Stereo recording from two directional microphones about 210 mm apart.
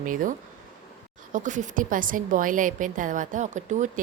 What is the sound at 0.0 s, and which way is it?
A woman's voice, 40° right (ahead or behind).